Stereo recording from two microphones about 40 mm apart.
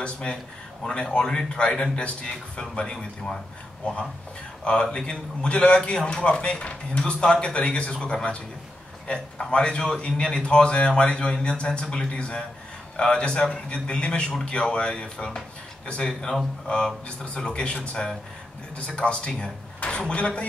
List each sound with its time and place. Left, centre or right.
0.0 s speech: left
1.2 s a man's voice: centre; by 17.7 s left
18.8 s speech: left